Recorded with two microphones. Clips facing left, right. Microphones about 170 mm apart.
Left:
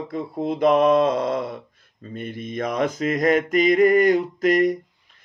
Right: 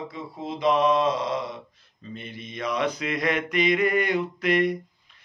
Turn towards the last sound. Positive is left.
turn(degrees=40)  # may be behind; listen again after turning